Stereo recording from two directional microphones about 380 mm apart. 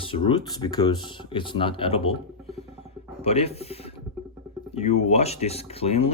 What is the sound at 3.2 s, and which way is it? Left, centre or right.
Speech, centre.